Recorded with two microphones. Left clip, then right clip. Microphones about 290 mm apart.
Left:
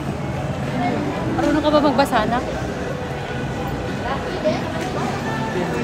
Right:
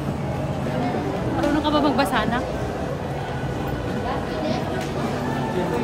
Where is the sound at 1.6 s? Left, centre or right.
Centre.